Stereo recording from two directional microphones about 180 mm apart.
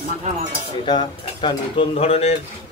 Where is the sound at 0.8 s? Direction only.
25° left (ahead or behind).